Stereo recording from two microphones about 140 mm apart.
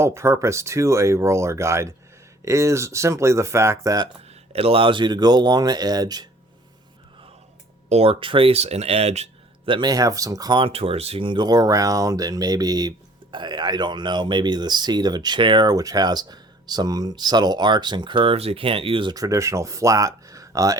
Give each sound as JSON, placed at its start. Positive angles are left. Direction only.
{"t": 0.0, "sound": "speech", "side_deg": -20}
{"t": 4.5, "sound": "speech", "side_deg": -40}
{"t": 7.9, "sound": "speech", "side_deg": -45}
{"t": 9.6, "sound": "speech", "side_deg": -35}
{"t": 19.1, "sound": "speech", "side_deg": -25}